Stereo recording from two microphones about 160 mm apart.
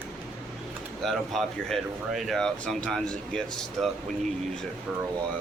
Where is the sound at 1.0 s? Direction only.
Centre (ahead or behind).